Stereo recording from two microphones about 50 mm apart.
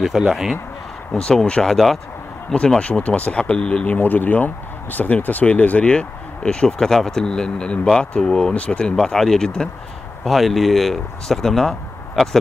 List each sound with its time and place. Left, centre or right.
0.0 s speech: centre
1.1 s speech: centre
2.8 s speech: left
3.8 s speech: left; by 8.5 s centre
8.5 s speech: left
9.0 s speech: centre